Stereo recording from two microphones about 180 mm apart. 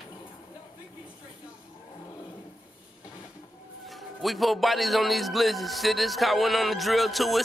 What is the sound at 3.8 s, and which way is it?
A man's voice, centre (ahead or behind).